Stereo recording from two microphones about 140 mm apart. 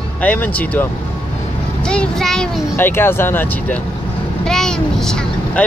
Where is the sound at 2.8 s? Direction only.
15° left (ahead or behind).